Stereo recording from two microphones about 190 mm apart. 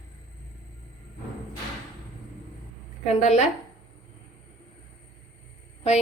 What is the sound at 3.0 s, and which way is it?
Speech, 35° left (ahead or behind).